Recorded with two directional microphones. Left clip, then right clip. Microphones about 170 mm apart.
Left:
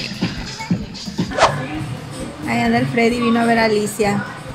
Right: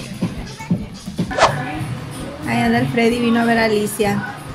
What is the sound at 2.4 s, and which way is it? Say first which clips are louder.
Speech: even; 5° left (ahead or behind).